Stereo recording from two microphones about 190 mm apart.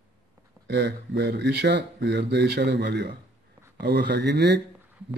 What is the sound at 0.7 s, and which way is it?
Speech, 60° right (ahead or behind).